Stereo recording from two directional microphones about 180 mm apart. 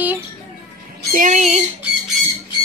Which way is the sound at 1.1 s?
45° right (ahead or behind).